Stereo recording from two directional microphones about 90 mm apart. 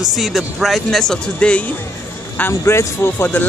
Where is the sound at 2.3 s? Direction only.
25° left (ahead or behind).